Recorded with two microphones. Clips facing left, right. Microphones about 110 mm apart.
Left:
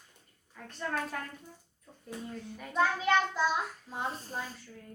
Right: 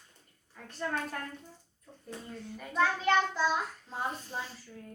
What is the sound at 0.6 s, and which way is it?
Child singing, centre (ahead or behind).